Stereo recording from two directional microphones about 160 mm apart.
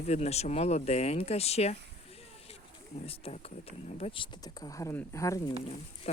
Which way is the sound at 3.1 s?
40° left (ahead or behind).